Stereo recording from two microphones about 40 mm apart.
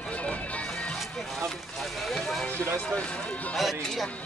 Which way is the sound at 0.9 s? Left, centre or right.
Centre.